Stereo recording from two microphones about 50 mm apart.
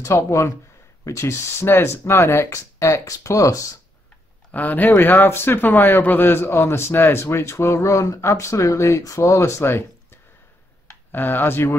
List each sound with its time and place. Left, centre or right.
0.0 s a man's voice: left
4.5 s a man's voice: left
11.1 s speech: left